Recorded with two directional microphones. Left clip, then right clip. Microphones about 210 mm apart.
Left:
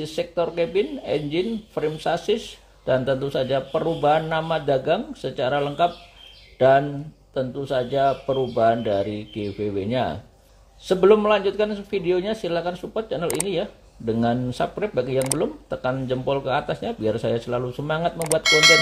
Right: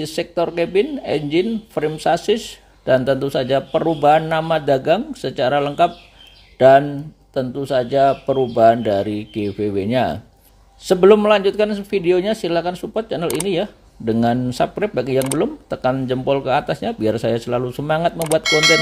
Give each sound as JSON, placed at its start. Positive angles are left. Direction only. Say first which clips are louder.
{"t": 0.0, "sound": "speech", "louder": "right 4 dB", "side_deg": -35}
{"t": 18.2, "sound": "speech", "louder": "left 1 dB", "side_deg": 0}